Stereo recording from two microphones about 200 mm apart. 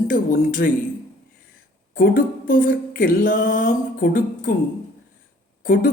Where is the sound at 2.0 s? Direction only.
45° left (ahead or behind).